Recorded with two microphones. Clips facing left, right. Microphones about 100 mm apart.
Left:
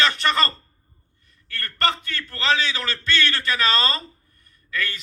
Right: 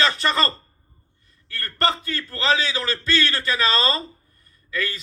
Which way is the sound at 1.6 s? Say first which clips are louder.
Right 1 dB; 25° right (ahead or behind).